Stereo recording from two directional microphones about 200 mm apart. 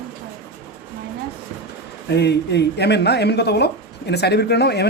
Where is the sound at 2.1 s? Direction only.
55° left (ahead or behind).